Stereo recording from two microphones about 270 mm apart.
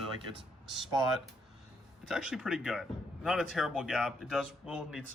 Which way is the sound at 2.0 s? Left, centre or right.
Centre.